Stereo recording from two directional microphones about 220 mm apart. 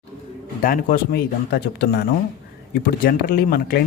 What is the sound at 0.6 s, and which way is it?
Speech, 40° left (ahead or behind).